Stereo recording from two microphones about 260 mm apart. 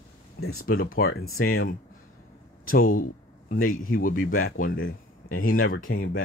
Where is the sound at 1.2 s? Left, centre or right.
Left.